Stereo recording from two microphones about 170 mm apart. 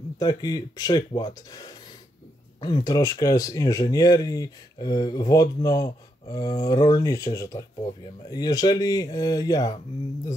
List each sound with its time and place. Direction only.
0.2 s speech: 20° left (ahead or behind)